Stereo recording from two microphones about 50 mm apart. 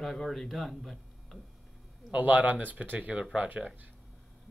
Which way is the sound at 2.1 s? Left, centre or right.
Right.